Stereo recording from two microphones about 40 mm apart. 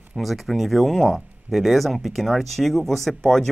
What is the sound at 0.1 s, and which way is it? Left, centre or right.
Speech, centre.